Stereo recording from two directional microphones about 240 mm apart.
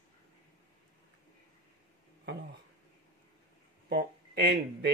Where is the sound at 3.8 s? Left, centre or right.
Right.